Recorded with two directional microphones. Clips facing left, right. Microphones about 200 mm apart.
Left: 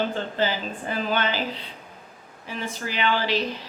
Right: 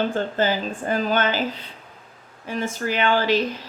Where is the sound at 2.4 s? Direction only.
50° right (ahead or behind).